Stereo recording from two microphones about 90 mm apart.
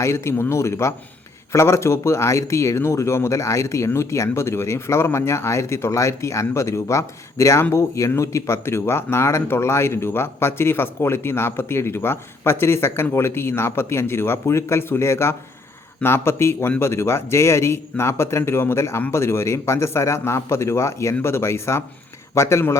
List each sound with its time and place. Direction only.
0.0 s speech: 30° left (ahead or behind)